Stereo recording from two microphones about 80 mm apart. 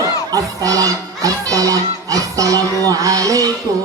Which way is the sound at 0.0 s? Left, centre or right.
Right.